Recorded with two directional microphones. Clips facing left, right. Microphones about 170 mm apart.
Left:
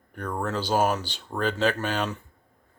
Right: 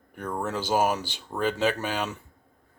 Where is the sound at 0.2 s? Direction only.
10° right (ahead or behind).